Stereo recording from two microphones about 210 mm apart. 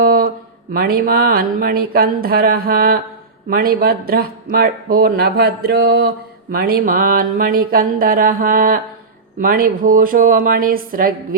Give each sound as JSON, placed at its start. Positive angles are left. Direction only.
{"t": 0.0, "sound": "music", "side_deg": -45}
{"t": 3.5, "sound": "a woman's voice", "side_deg": -45}